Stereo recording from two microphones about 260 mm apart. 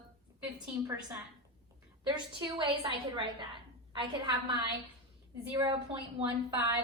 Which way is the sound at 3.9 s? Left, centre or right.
Centre.